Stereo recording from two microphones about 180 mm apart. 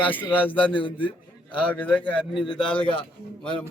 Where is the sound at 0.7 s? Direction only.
25° left (ahead or behind).